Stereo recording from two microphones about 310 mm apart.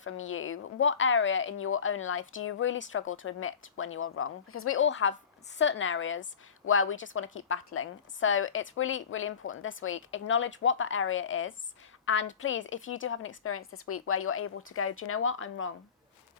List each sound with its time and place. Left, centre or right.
0.0 s a woman's voice: left